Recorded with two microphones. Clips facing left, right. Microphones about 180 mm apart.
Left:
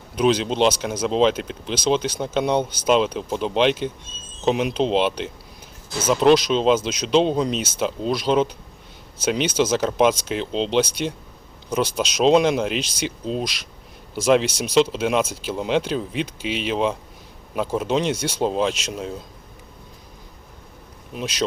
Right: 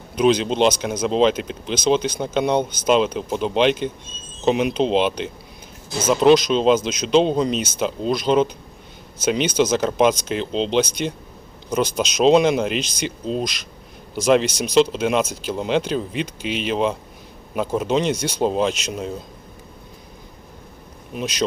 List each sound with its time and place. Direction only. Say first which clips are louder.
0.2 s speech: right 2 dB; centre (ahead or behind)
21.1 s speech: right 2 dB; centre (ahead or behind)